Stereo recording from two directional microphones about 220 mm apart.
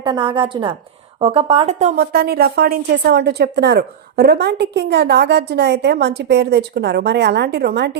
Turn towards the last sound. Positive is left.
turn(degrees=-50)  # may be behind; listen again after turning